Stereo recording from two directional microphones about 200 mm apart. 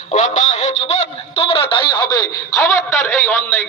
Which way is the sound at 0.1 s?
35° left (ahead or behind).